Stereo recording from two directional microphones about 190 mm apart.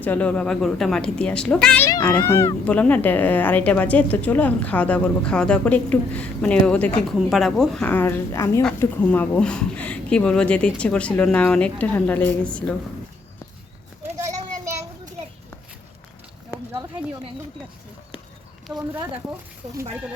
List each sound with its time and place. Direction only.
0.0 s a woman's voice: 10° left (ahead or behind)
1.9 s speech: 20° left (ahead or behind)
18.7 s a woman's voice: 5° right (ahead or behind)
19.6 s speech: 30° right (ahead or behind)